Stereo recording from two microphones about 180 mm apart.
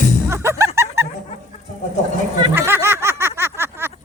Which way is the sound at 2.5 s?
10° right (ahead or behind).